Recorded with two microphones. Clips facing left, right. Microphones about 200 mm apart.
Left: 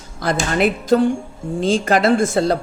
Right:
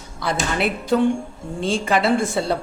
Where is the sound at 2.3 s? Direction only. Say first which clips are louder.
Left 5 dB; 90° left.